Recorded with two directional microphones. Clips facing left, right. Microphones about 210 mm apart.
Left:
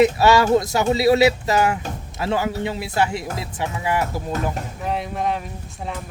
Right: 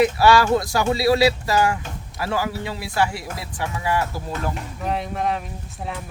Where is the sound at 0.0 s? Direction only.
20° left (ahead or behind).